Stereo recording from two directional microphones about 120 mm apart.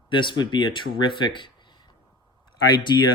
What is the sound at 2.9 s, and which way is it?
Speech, 35° left (ahead or behind).